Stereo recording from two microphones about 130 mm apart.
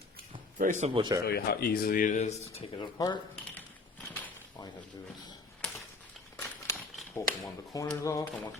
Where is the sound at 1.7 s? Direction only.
90° left; by 2.6 s 60° left (ahead or behind).